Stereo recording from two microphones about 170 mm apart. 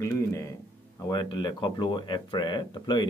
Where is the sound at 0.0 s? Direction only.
20° left (ahead or behind).